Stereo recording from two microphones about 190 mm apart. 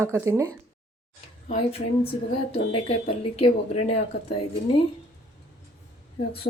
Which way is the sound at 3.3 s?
30° left (ahead or behind).